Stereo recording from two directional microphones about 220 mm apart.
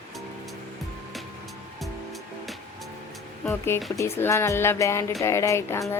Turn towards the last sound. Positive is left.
turn(degrees=15)  # may be behind; listen again after turning